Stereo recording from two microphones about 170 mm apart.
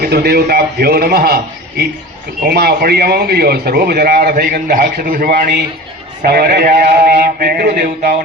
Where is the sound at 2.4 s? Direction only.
65° right (ahead or behind).